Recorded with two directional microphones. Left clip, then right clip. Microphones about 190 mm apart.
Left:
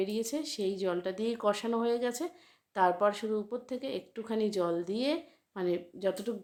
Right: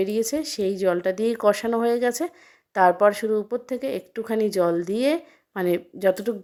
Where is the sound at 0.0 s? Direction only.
35° right (ahead or behind).